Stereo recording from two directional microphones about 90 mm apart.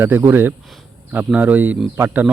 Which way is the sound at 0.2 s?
25° right (ahead or behind).